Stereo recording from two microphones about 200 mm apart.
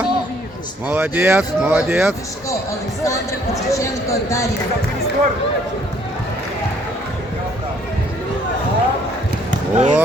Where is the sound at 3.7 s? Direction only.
15° left (ahead or behind).